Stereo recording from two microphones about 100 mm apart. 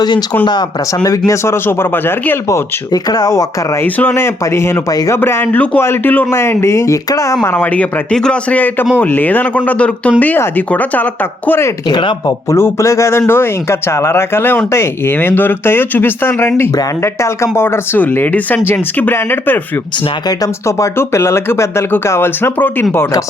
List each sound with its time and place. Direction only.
0.0 s speech: 45° left (ahead or behind)
1.3 s speech: 25° left (ahead or behind)
2.9 s speech: 40° left (ahead or behind)
3.8 s speech: 20° left (ahead or behind)
5.2 s speech: 20° left (ahead or behind)
7.4 s speech: 20° left (ahead or behind)
11.9 s speech: 50° left (ahead or behind)
12.5 s speech: 25° left (ahead or behind)
20.2 s speech: 35° left (ahead or behind)